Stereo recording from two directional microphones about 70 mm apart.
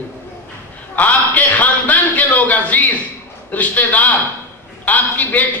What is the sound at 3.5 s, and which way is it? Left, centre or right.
A man's voice, left.